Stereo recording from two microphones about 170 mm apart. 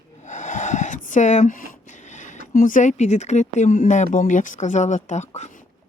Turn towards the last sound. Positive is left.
turn(degrees=40)  # may be behind; listen again after turning